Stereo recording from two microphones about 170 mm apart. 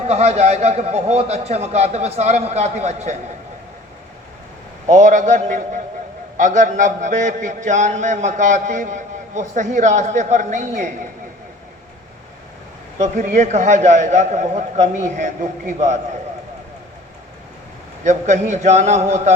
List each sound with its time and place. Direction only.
0.0 s a man's voice: 40° right (ahead or behind)
4.9 s a man's voice: 45° right (ahead or behind)
13.0 s a man's voice: 45° right (ahead or behind)
18.0 s a man's voice: 45° right (ahead or behind)